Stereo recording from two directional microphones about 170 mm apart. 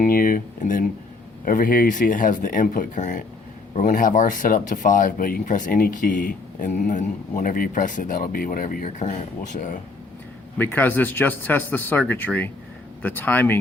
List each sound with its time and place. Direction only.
0.0 s speech: 55° left (ahead or behind)
10.6 s speech: 10° left (ahead or behind)